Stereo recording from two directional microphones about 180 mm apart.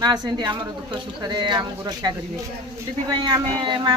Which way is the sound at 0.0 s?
25° right (ahead or behind).